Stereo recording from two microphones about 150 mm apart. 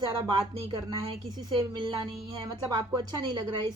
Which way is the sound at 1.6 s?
30° right (ahead or behind).